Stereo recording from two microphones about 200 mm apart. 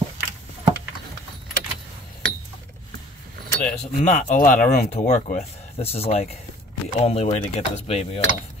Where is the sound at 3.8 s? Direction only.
35° left (ahead or behind).